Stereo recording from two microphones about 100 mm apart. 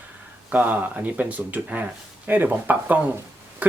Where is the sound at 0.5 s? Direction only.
15° right (ahead or behind).